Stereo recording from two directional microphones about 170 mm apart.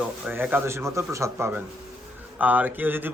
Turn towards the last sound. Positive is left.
turn(degrees=-10)  # may be behind; listen again after turning